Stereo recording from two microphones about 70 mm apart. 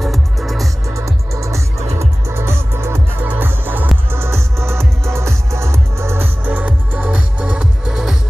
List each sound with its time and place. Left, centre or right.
0.0 s music: centre
0.8 s music: right
7.0 s music: centre